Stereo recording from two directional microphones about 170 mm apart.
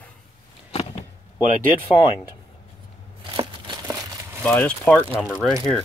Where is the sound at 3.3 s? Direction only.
30° right (ahead or behind).